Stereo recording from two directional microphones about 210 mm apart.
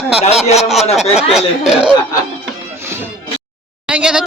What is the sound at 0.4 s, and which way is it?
Speech, 30° left (ahead or behind).